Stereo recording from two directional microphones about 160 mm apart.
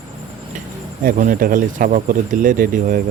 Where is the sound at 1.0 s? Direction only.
60° right (ahead or behind).